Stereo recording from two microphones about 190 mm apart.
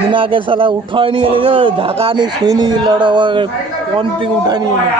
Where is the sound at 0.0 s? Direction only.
25° right (ahead or behind).